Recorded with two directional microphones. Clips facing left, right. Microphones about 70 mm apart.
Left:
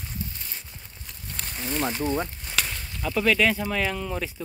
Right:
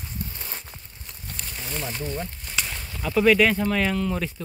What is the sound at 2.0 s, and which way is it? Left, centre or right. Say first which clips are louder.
Speech: left 5 dB; left.